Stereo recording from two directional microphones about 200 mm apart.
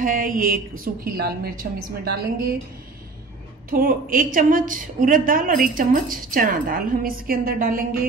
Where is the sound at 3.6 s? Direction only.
45° right (ahead or behind).